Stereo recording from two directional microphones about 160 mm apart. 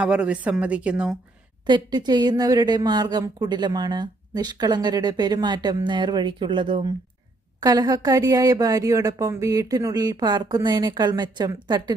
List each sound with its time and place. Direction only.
0.0 s a woman's voice: 5° right (ahead or behind)
1.6 s a woman's voice: 25° right (ahead or behind)